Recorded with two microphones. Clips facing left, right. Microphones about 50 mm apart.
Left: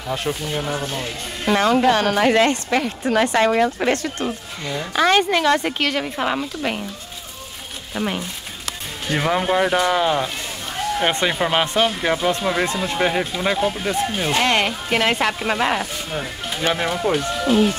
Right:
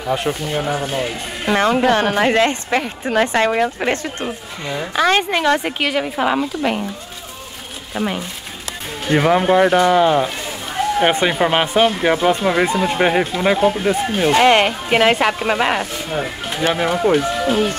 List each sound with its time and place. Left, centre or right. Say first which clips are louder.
0.0 s speech: right 4 dB; centre
7.9 s speech: right 2 dB; centre